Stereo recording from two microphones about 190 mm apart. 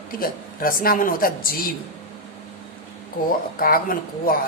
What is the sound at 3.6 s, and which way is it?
Speech, 50° left (ahead or behind).